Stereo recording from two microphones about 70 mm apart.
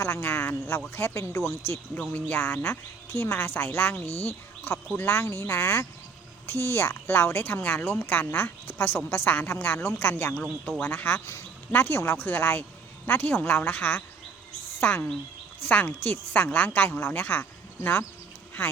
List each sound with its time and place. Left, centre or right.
0.0 s speech: left
2.0 s speech: left